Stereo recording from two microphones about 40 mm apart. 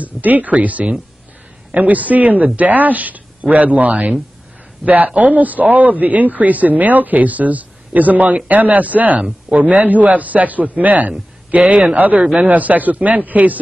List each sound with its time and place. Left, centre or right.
0.0 s a man's voice: right